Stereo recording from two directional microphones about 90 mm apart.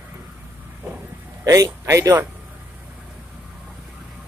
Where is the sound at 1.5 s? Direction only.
35° right (ahead or behind).